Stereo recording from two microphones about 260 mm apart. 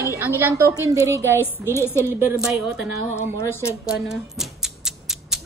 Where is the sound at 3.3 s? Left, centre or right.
Centre.